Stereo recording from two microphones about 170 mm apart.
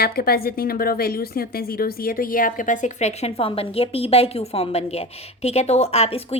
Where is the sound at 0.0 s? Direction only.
65° left (ahead or behind).